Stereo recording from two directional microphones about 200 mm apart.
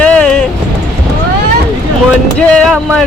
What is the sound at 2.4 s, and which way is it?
Speech, 5° left (ahead or behind).